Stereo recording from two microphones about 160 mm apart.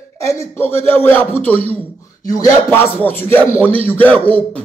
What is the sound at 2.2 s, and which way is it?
A man's voice, 20° left (ahead or behind).